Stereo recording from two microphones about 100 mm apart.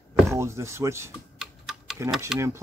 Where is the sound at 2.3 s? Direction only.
5° right (ahead or behind).